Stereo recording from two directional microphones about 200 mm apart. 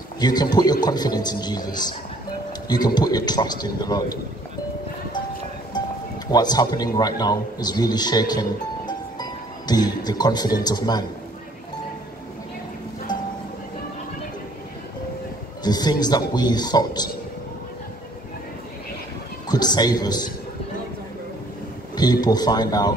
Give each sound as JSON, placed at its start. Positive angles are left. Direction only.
{"t": 0.2, "sound": "speech", "side_deg": 20}
{"t": 6.3, "sound": "speech", "side_deg": 20}
{"t": 15.6, "sound": "speech", "side_deg": 20}
{"t": 19.4, "sound": "a man's voice", "side_deg": 20}
{"t": 21.9, "sound": "speech", "side_deg": 20}